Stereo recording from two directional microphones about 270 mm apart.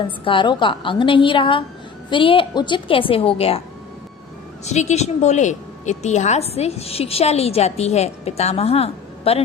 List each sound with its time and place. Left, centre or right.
0.3 s a woman's voice: centre
4.6 s a woman's voice: left